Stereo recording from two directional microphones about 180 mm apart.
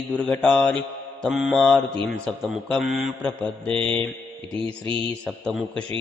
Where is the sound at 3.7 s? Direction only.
30° right (ahead or behind).